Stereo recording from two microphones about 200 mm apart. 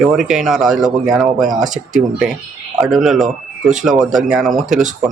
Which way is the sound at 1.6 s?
40° right (ahead or behind).